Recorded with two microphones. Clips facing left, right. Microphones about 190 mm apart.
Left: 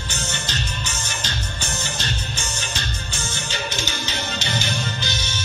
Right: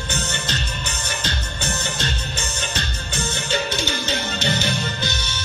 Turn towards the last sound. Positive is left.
turn(degrees=-55)  # may be behind; listen again after turning